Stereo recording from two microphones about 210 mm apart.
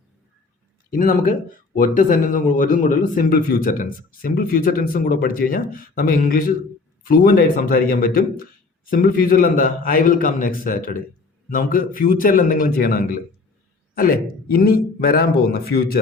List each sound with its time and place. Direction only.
0.9 s a man's voice: 40° left (ahead or behind)